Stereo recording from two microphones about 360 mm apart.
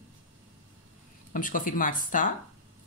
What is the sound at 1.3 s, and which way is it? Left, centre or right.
Speech, left.